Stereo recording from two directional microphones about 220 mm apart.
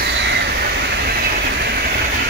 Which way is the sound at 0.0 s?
55° right (ahead or behind).